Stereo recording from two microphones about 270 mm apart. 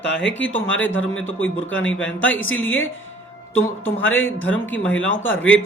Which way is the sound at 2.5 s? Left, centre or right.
Centre.